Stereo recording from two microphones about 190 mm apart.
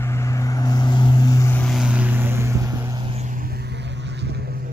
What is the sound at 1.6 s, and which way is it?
Vehicle, centre (ahead or behind).